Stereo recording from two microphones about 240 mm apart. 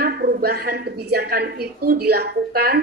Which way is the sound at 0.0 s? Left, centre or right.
Right.